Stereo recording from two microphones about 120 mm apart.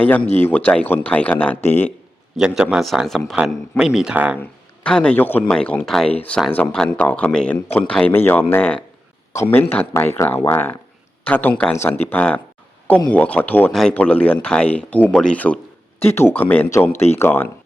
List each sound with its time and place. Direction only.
0.3 s speech: 15° left (ahead or behind)
2.4 s a man's voice: 10° right (ahead or behind)
4.4 s speech: 10° left (ahead or behind)
16.9 s speech: 60° left (ahead or behind)
17.2 s speech: 20° left (ahead or behind)